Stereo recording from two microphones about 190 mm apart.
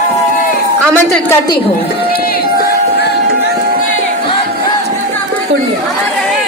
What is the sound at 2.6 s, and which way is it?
Music, 60° left (ahead or behind).